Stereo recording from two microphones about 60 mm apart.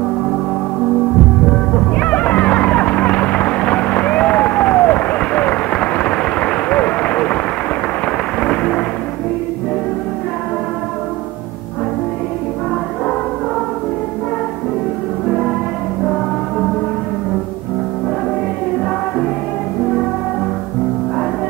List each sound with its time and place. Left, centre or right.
2.0 s a sound: left
8.4 s thunder: centre
15.2 s music: centre